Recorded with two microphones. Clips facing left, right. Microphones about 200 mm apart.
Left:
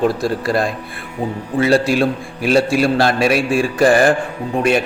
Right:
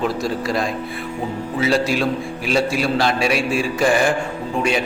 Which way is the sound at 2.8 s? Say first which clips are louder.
Left 4 dB; 50° left (ahead or behind).